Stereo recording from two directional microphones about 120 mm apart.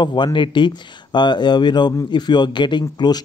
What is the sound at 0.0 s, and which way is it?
A man's voice, 40° left (ahead or behind).